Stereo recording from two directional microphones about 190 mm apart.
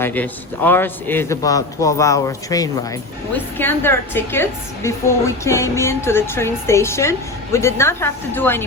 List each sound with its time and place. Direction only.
0.0 s a woman's voice: 10° left (ahead or behind)